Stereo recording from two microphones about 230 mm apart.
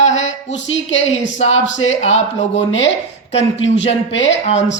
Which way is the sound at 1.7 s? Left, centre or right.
Left.